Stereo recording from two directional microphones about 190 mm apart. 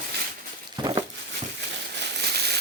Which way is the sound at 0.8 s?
25° right (ahead or behind).